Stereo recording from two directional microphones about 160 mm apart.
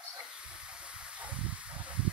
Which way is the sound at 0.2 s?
5° right (ahead or behind).